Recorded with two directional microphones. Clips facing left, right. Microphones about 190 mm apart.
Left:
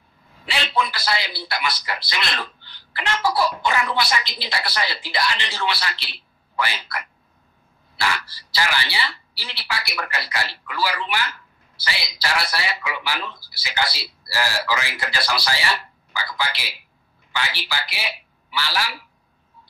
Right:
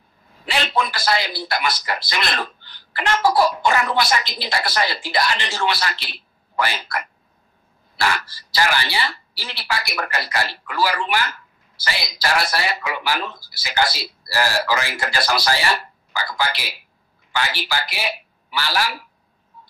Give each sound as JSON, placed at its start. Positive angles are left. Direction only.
{"t": 0.5, "sound": "a man's voice", "side_deg": -45}